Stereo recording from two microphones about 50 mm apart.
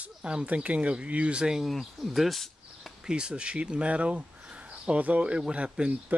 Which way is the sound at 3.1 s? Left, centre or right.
Centre.